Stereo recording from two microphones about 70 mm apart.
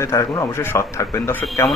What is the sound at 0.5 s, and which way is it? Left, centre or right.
Speech, left.